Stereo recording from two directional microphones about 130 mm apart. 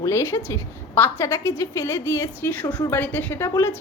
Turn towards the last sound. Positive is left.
turn(degrees=20)  # may be behind; listen again after turning